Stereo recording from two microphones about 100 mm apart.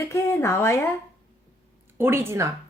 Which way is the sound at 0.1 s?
25° left (ahead or behind).